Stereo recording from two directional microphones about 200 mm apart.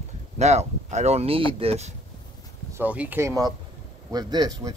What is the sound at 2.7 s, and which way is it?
Speech, 10° right (ahead or behind).